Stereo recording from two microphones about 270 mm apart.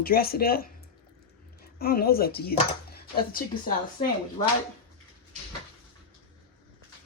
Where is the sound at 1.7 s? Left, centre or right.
Left.